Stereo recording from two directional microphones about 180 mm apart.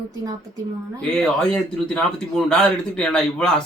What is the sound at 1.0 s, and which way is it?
A man's voice, 5° left (ahead or behind).